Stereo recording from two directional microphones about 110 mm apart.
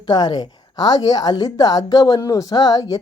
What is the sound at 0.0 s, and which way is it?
Speech, 40° left (ahead or behind).